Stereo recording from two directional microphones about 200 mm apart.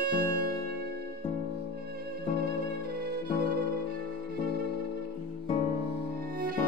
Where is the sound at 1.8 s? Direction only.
50° right (ahead or behind).